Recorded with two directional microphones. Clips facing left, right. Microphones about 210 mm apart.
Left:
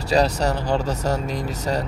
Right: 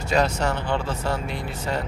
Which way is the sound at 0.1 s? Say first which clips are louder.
Left 3 dB; 35° left (ahead or behind).